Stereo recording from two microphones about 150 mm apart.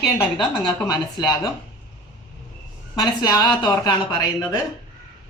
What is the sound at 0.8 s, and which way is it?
Speech, 25° left (ahead or behind).